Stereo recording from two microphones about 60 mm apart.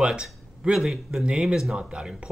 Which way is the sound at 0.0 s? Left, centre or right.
Centre.